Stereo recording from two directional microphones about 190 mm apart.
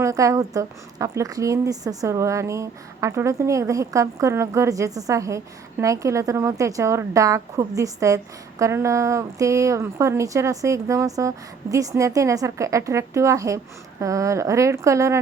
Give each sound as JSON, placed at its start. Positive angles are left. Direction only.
{"t": 0.0, "sound": "a woman's voice", "side_deg": -15}